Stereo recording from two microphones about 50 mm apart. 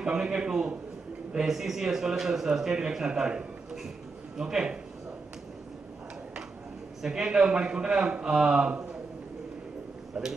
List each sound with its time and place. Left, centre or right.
0.0 s speech: centre
7.0 s speech: centre
10.1 s speech: right